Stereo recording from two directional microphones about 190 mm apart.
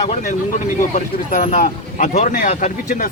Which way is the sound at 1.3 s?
40° left (ahead or behind).